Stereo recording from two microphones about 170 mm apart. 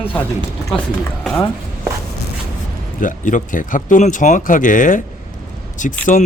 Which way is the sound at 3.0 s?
50° left (ahead or behind).